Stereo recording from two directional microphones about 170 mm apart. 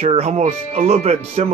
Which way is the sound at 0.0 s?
40° right (ahead or behind).